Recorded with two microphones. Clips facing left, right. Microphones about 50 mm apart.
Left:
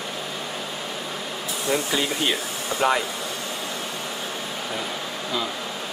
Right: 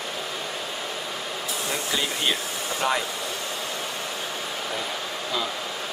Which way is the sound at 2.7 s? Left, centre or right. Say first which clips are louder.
Left 4 dB; centre.